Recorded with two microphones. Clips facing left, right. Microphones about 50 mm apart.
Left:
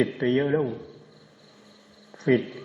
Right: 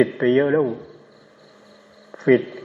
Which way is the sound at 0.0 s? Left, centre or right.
Right.